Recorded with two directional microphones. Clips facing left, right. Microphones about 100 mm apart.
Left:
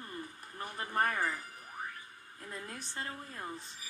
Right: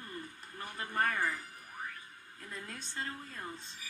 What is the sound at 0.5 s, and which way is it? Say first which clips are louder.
Speech: left 2 dB; 15° left (ahead or behind).